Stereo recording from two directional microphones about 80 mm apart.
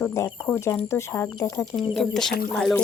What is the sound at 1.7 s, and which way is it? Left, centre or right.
Speech, centre.